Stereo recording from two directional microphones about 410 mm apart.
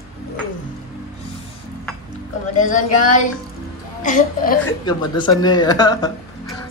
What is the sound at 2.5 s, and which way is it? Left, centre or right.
Speech, centre.